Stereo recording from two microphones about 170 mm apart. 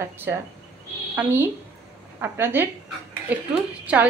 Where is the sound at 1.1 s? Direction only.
10° right (ahead or behind).